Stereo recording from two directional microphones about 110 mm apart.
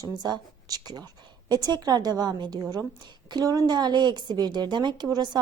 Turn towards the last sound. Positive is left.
turn(degrees=-40)  # may be behind; listen again after turning